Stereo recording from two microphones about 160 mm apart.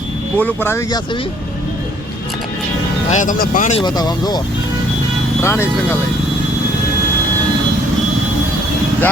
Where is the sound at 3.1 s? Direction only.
55° left (ahead or behind).